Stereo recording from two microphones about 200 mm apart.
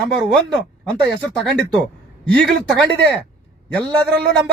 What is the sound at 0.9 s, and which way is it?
A man's voice, 5° left (ahead or behind).